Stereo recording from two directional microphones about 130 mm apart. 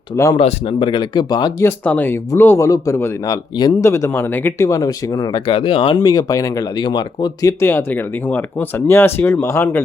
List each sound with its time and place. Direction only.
0.3 s speech: 40° left (ahead or behind)
1.6 s speech: 10° left (ahead or behind); by 7.3 s 35° left (ahead or behind)
7.4 s speech: 15° left (ahead or behind)